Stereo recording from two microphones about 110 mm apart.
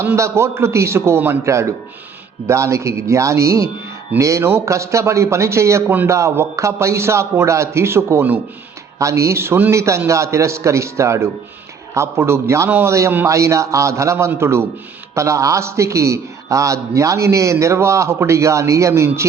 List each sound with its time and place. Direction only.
0.0 s a man's voice: 25° right (ahead or behind)